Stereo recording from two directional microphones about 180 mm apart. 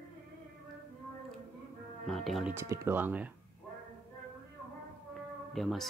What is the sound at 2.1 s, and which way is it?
Speech, centre (ahead or behind).